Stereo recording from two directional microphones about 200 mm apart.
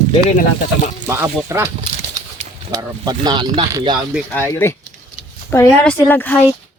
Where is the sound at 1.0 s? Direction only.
15° right (ahead or behind).